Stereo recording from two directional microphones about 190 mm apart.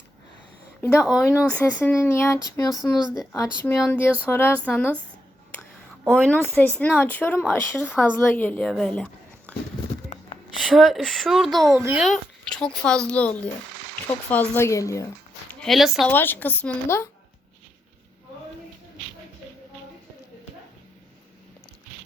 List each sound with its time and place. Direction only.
0.9 s speech: centre (ahead or behind)
1.2 s speech: 10° left (ahead or behind)
2.9 s speech: centre (ahead or behind)
3.3 s speech: 15° left (ahead or behind)
3.8 s speech: 5° left (ahead or behind)
6.1 s speech: 5° left (ahead or behind)
10.1 s a sound: 35° left (ahead or behind)
10.6 s speech: centre (ahead or behind)
11.8 s a child's voice: 10° right (ahead or behind)
12.0 s speech: 5° left (ahead or behind)
15.6 s speech: centre (ahead or behind)
16.1 s speech: 10° left (ahead or behind)